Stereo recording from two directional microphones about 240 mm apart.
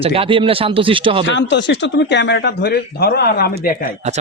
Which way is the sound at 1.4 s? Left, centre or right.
Left.